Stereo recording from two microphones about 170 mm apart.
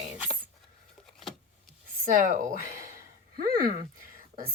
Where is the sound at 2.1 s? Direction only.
50° right (ahead or behind).